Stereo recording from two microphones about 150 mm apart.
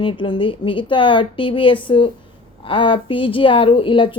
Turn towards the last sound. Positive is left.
turn(degrees=35)  # may be behind; listen again after turning